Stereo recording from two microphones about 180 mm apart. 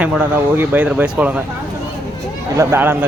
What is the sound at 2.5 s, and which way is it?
Speech, 15° right (ahead or behind).